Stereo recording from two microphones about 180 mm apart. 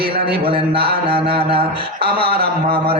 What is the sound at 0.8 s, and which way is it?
Mantra, 30° right (ahead or behind).